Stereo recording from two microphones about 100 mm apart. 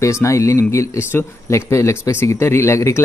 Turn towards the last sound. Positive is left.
turn(degrees=30)  # may be behind; listen again after turning